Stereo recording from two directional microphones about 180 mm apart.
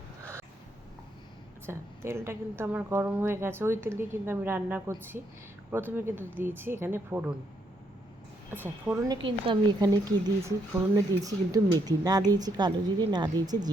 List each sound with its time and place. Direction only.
1.6 s a woman's voice: 15° right (ahead or behind)
8.4 s a woman's voice: 10° right (ahead or behind)
9.2 s speech: 25° right (ahead or behind)